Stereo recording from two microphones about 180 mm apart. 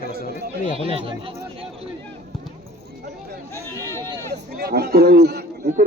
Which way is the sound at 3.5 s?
15° left (ahead or behind).